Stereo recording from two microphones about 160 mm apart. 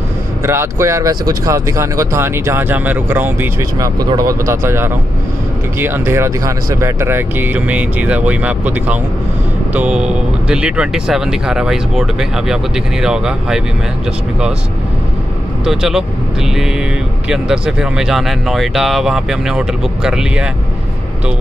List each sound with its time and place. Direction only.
0.4 s speech: 15° right (ahead or behind)
4.0 s speech: 25° right (ahead or behind); by 13.6 s 5° right (ahead or behind)
15.6 s speech: 5° right (ahead or behind)
17.3 s speech: 5° right (ahead or behind)